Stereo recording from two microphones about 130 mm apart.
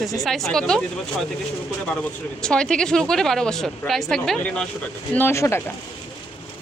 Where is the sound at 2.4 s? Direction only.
5° left (ahead or behind).